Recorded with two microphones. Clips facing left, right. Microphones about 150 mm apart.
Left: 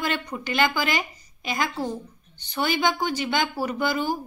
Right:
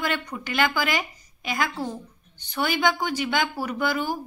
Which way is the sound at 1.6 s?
10° left (ahead or behind).